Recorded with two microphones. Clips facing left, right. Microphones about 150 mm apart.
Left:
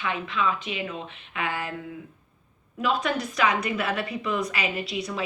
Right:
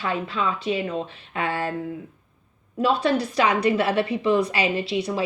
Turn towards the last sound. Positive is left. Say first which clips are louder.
# right 6 dB
turn(degrees=-30)  # may be behind; listen again after turning